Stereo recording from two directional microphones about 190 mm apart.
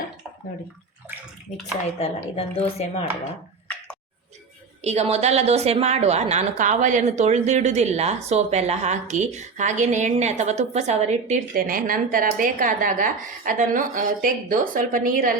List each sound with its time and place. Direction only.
1.5 s speech: 40° left (ahead or behind)
4.8 s a woman's voice: 35° right (ahead or behind)